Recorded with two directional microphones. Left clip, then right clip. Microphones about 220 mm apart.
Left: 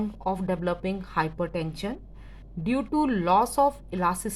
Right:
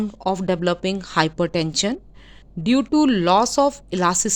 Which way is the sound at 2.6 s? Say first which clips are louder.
Right 8 dB; 30° right (ahead or behind).